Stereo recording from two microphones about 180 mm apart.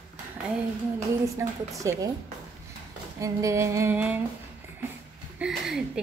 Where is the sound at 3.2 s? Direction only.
15° right (ahead or behind).